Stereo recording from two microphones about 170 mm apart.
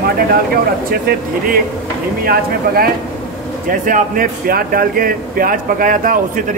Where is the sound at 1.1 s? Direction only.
60° right (ahead or behind).